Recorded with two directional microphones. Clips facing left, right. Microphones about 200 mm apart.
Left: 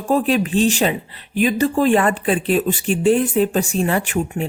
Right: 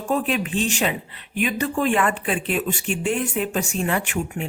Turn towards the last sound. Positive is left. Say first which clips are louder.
# left 5 dB
turn(degrees=35)  # may be behind; listen again after turning